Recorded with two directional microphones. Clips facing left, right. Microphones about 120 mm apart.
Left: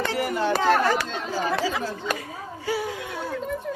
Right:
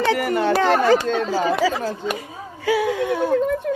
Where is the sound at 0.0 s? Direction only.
65° right (ahead or behind).